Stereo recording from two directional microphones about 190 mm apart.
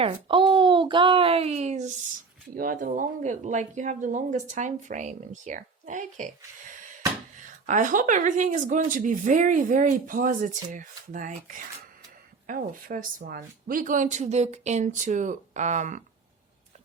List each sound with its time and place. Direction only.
0.0 s a child's voice: 30° right (ahead or behind)